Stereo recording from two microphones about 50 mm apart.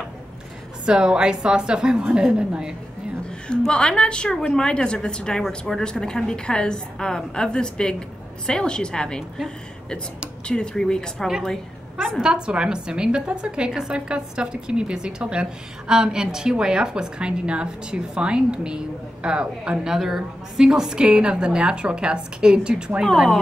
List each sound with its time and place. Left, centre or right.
0.8 s a woman's voice: centre
3.3 s a woman's voice: centre
10.4 s a woman's voice: centre
12.2 s a woman's voice: centre